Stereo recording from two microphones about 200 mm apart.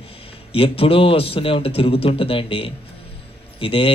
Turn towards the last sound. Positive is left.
turn(degrees=25)  # may be behind; listen again after turning